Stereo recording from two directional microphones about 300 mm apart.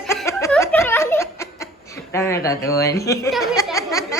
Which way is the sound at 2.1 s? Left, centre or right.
Centre.